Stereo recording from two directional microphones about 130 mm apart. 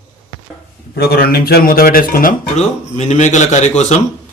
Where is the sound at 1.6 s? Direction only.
90° left.